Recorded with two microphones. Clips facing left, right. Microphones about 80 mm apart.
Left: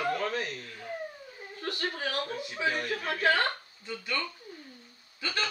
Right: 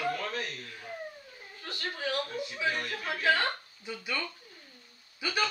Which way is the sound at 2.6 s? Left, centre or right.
Centre.